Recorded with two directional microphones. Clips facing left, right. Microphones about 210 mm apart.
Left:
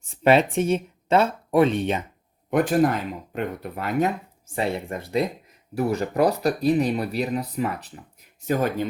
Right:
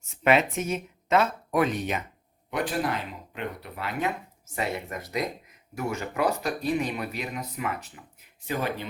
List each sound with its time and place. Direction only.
0.0 s speech: 30° left (ahead or behind)
2.5 s speech: 45° left (ahead or behind)
4.5 s speech: 30° left (ahead or behind)
8.4 s speech: 45° left (ahead or behind)